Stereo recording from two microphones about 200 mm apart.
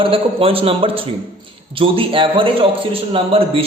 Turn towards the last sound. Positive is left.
turn(degrees=-30)  # may be behind; listen again after turning